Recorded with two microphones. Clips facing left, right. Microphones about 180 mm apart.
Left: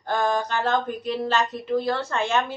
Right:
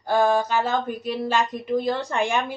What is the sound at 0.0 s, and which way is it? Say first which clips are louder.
Speech: right 4 dB; 10° right (ahead or behind).